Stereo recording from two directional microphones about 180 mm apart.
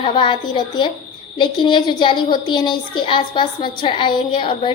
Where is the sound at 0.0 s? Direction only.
30° left (ahead or behind).